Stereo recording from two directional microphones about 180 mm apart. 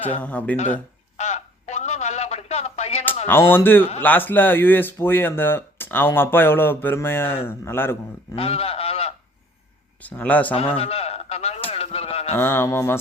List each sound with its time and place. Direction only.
0.0 s speech: 10° left (ahead or behind)
0.6 s telephone: 40° left (ahead or behind)
3.2 s speech: 10° left (ahead or behind)
8.4 s speech: 35° left (ahead or behind)
10.0 s speech: 10° left (ahead or behind)
10.8 s a sound: 35° left (ahead or behind)
12.4 s speech: 10° left (ahead or behind)